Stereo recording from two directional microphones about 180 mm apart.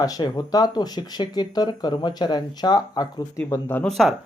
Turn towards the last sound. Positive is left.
turn(degrees=0)  # may be behind; listen again after turning